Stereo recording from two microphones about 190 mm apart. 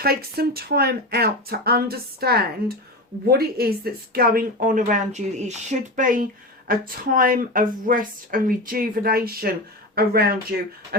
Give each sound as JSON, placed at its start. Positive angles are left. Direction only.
{"t": 0.0, "sound": "speech", "side_deg": -55}